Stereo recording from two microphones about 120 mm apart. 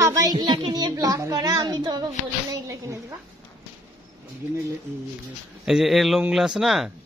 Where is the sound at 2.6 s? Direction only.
25° right (ahead or behind).